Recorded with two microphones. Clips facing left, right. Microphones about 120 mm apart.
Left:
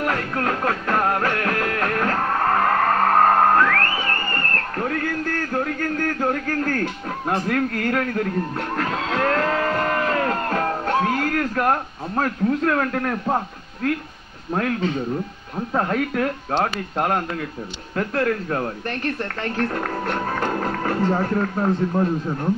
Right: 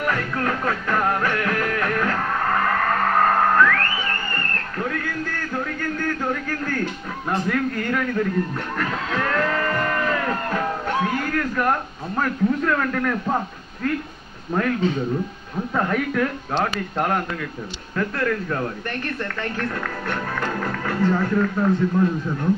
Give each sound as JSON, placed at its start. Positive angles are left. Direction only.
{"t": 0.0, "sound": "music", "side_deg": 35}
{"t": 7.2, "sound": "speech", "side_deg": 50}
{"t": 8.7, "sound": "a sound", "side_deg": 30}
{"t": 15.7, "sound": "speech", "side_deg": 30}
{"t": 17.9, "sound": "speech", "side_deg": 35}